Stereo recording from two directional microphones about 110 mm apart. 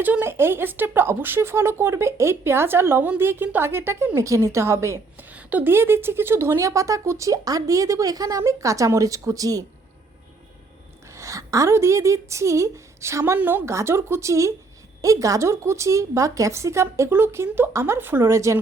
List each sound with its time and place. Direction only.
0.0 s speech: 15° right (ahead or behind); by 9.6 s 35° right (ahead or behind)
11.0 s speech: 30° right (ahead or behind)